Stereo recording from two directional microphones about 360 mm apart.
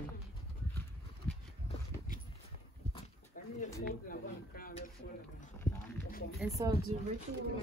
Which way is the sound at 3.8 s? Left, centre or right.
Left.